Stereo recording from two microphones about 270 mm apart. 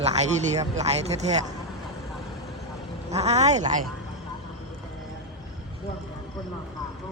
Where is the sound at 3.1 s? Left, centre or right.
Right.